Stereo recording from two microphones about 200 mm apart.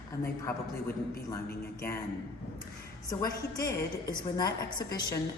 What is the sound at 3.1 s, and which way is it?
A woman's voice, 20° left (ahead or behind).